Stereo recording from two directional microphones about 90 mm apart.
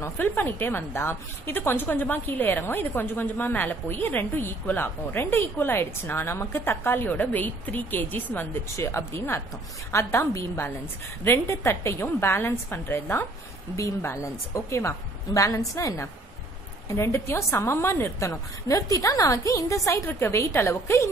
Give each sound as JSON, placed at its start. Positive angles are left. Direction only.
{"t": 0.0, "sound": "a woman's voice", "side_deg": 20}